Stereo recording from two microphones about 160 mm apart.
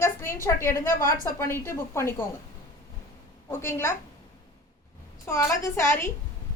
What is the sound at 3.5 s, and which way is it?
Speech, 15° left (ahead or behind).